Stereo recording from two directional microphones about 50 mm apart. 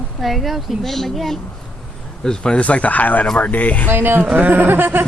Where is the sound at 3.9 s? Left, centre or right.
Right.